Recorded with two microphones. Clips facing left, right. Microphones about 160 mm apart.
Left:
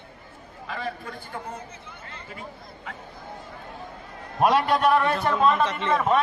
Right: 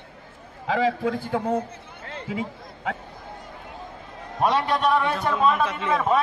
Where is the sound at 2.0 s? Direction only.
80° right.